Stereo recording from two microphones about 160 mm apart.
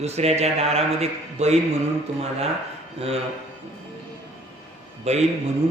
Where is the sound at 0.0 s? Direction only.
40° right (ahead or behind).